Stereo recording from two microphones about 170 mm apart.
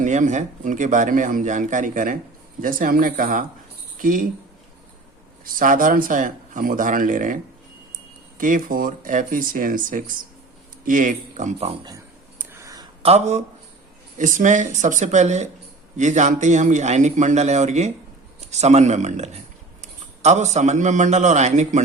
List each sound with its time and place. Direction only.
0.0 s speech: 45° right (ahead or behind)
5.5 s speech: 55° right (ahead or behind)
8.4 s speech: 50° right (ahead or behind)
12.4 s a sound: 15° right (ahead or behind)
13.0 s a man's voice: 35° right (ahead or behind)